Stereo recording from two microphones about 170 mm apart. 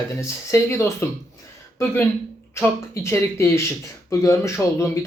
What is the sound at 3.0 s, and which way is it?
A man's voice, 15° left (ahead or behind).